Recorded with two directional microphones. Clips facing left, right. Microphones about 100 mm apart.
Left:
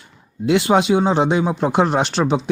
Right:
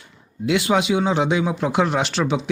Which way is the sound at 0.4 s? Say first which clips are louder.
Left 4 dB; 35° left (ahead or behind).